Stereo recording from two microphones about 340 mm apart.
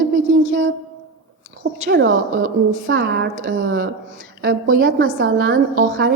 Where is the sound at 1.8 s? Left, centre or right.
Right.